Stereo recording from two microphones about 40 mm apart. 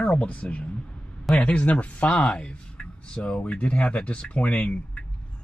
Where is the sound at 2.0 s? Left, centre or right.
Left.